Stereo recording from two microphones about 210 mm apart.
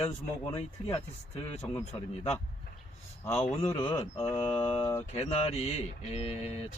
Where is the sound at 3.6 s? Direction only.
20° left (ahead or behind).